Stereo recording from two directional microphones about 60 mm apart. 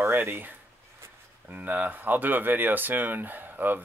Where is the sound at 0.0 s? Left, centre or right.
Right.